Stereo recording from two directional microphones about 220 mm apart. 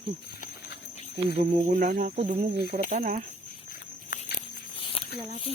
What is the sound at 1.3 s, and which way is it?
Speech, 35° right (ahead or behind).